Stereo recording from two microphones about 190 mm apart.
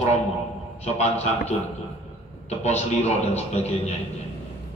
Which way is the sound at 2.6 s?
35° left (ahead or behind).